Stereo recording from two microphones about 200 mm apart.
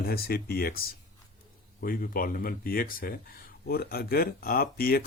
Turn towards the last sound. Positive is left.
turn(degrees=50)  # may be behind; listen again after turning